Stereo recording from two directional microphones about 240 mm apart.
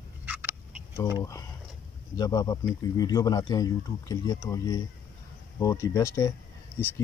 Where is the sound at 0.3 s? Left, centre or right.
Centre.